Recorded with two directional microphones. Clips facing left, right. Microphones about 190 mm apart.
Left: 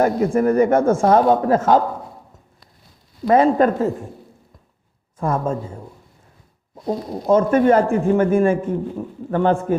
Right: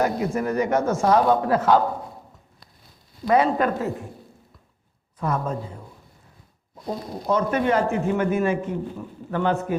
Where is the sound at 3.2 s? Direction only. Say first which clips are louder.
Left 5 dB; 45° left (ahead or behind).